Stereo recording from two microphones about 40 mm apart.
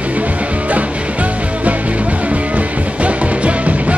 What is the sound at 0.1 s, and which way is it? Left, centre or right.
Music, right.